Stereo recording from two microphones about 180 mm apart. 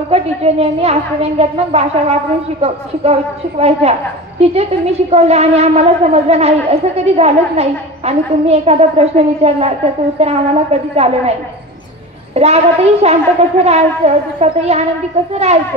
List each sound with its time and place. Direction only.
0.1 s speech: 35° right (ahead or behind)
5.1 s speech: 35° right (ahead or behind)
12.4 s speech: 35° right (ahead or behind)